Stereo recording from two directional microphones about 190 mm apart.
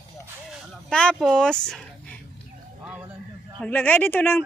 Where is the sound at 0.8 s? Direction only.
5° left (ahead or behind).